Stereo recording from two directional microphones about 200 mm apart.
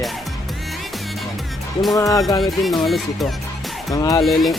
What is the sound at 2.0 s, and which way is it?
Speech, 15° left (ahead or behind).